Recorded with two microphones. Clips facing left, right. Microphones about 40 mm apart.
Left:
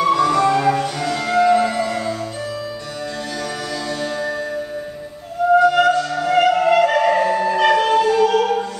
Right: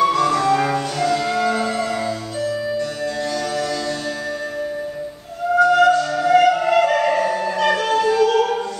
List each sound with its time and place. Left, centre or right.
0.0 s music: centre
0.6 s music: centre
0.9 s music: centre
2.0 s music: left
5.6 s music: centre
6.2 s music: centre